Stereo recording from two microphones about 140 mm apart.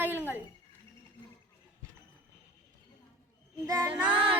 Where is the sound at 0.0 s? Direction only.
15° right (ahead or behind).